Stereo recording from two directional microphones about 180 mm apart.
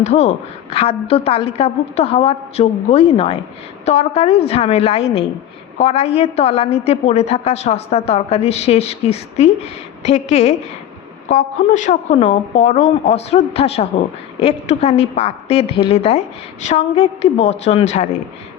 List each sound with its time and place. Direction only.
0.0 s a woman's voice: 40° left (ahead or behind)